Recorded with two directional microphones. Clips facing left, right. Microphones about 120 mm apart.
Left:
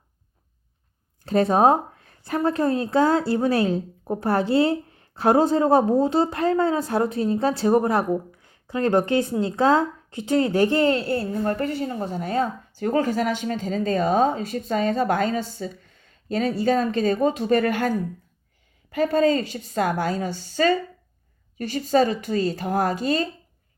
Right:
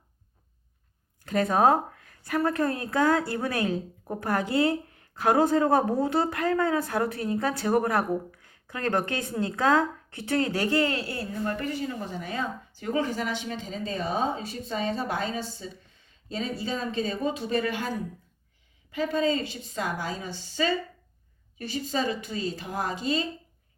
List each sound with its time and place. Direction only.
1.2 s a woman's voice: 30° left (ahead or behind); by 20.7 s 55° left (ahead or behind)
21.6 s speech: 45° left (ahead or behind)